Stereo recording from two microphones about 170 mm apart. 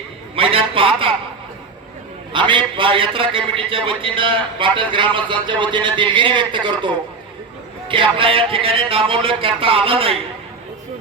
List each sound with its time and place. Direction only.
0.3 s speech: 30° right (ahead or behind)
2.3 s a man's voice: 30° right (ahead or behind)